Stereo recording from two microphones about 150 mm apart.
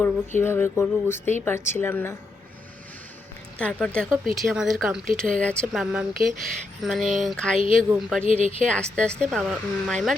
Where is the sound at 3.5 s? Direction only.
5° left (ahead or behind).